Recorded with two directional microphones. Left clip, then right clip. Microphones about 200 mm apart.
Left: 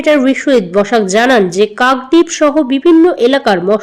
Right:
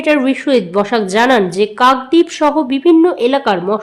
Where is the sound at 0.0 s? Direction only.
5° left (ahead or behind).